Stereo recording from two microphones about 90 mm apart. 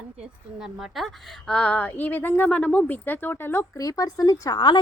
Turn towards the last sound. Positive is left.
turn(degrees=55)  # may be behind; listen again after turning